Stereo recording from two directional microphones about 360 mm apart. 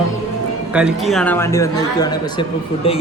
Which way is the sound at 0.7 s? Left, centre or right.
Centre.